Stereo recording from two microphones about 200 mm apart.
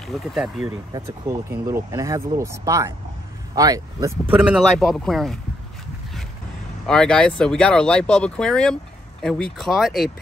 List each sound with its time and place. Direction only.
0.0 s speech: centre (ahead or behind)
0.9 s speech: 15° right (ahead or behind)
4.5 s speech: centre (ahead or behind)
6.9 s speech: 5° left (ahead or behind)